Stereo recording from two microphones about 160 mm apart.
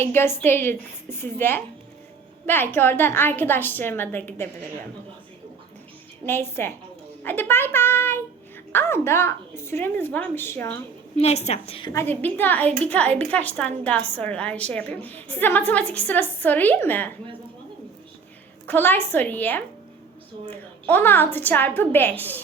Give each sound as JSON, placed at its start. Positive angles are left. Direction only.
{"t": 0.0, "sound": "a woman's voice", "side_deg": 15}
{"t": 6.2, "sound": "a woman's voice", "side_deg": 15}
{"t": 11.2, "sound": "a woman's voice", "side_deg": 45}
{"t": 11.9, "sound": "a woman's voice", "side_deg": 15}
{"t": 18.7, "sound": "a woman's voice", "side_deg": 10}